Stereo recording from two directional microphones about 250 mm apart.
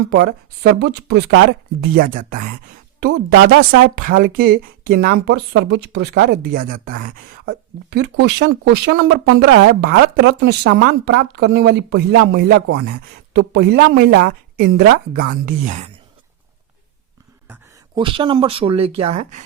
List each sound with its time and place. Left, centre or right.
0.1 s speech: right
17.9 s speech: centre